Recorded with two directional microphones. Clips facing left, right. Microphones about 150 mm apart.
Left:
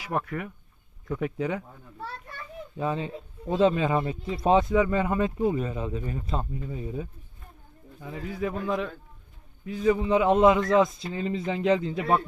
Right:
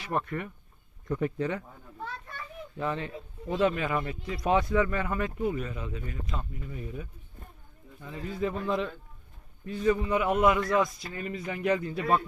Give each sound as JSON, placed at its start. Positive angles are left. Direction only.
{"t": 0.0, "sound": "speech", "side_deg": 5}
{"t": 2.7, "sound": "a man's voice", "side_deg": 15}
{"t": 8.0, "sound": "speech", "side_deg": 10}
{"t": 10.0, "sound": "a man's voice", "side_deg": 25}